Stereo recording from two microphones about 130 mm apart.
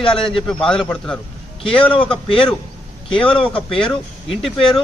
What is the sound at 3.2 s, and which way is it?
Speech, 40° left (ahead or behind).